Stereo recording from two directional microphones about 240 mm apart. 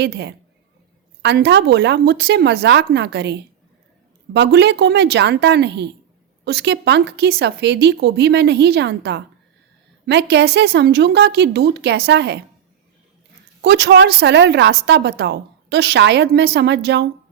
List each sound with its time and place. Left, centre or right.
0.0 s a woman's voice: right
13.6 s a woman's voice: right